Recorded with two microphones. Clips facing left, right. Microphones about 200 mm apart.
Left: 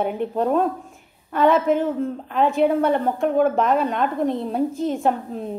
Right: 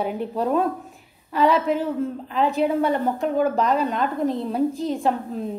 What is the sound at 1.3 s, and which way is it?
A man's voice, 50° left (ahead or behind).